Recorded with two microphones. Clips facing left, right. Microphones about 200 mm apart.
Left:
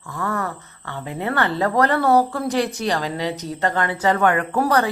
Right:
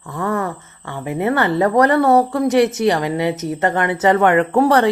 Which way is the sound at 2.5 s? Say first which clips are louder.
Right 7 dB; 20° right (ahead or behind).